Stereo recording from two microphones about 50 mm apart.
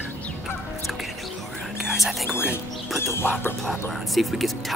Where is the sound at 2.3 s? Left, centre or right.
Left.